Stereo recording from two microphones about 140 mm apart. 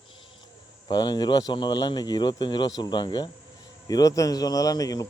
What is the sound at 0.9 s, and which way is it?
Speech, 30° left (ahead or behind).